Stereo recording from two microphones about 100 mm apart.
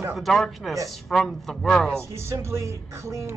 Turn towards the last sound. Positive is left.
turn(degrees=-30)  # may be behind; listen again after turning